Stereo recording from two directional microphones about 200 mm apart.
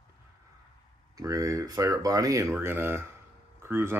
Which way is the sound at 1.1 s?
15° right (ahead or behind).